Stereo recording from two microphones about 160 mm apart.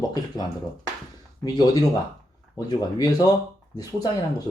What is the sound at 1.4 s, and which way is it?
Speech, 25° left (ahead or behind).